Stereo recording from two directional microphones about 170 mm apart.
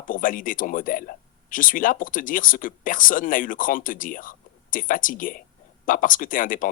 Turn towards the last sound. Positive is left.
turn(degrees=55)  # may be behind; listen again after turning